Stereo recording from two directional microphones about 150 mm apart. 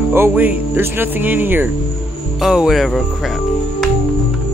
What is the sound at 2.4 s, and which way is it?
Music, 5° right (ahead or behind).